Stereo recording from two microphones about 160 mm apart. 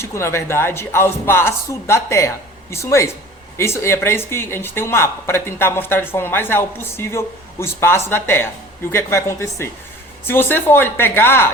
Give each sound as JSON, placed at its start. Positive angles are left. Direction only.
{"t": 0.0, "sound": "speech", "side_deg": 15}